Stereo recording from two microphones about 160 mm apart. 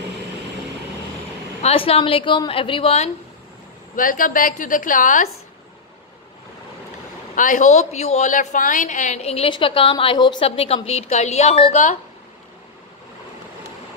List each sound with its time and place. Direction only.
1.6 s a woman's voice: 35° left (ahead or behind)
3.9 s a woman's voice: 60° left (ahead or behind)
7.3 s a woman's voice: 55° left (ahead or behind)